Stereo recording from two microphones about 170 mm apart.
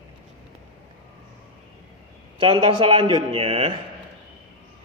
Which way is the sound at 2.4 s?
30° right (ahead or behind).